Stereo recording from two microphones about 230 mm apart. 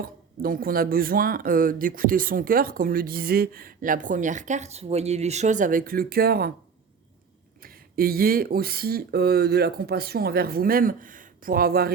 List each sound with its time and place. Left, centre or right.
0.0 s speech: right
7.6 s speech: right